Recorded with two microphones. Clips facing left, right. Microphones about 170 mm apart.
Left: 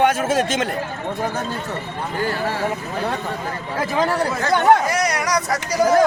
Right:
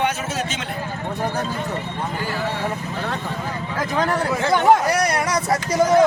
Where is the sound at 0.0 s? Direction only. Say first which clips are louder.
Left 6 dB; 50° left (ahead or behind).